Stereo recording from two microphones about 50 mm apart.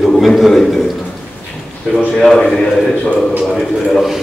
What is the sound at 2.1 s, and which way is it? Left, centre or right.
A man's voice, centre.